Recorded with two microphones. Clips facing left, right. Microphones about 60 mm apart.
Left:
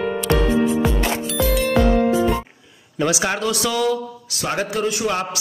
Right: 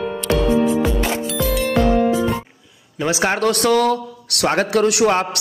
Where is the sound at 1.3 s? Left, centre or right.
Centre.